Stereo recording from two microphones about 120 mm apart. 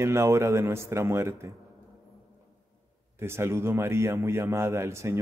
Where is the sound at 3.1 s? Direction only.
20° right (ahead or behind).